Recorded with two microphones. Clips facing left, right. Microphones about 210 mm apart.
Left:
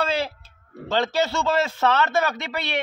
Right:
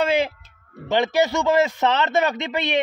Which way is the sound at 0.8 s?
15° right (ahead or behind).